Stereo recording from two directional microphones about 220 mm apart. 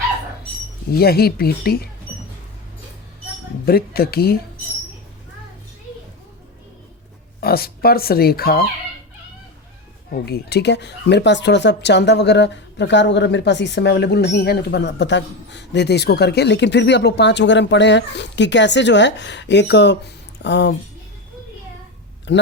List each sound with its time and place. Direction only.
0.9 s speech: 45° left (ahead or behind)
3.7 s speech: 45° left (ahead or behind)
7.4 s speech: 45° left (ahead or behind)
10.2 s speech: 45° left (ahead or behind)
22.3 s speech: 55° left (ahead or behind)